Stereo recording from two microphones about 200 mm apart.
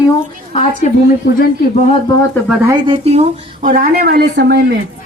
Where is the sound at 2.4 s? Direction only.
5° right (ahead or behind).